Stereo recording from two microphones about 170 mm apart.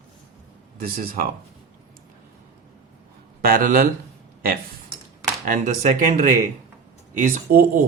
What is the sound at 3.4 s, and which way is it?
Speech, 55° right (ahead or behind).